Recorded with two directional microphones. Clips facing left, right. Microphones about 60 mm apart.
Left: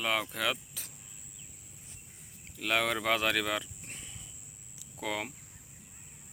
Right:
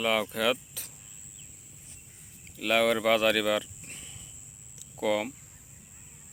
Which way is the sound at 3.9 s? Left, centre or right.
Left.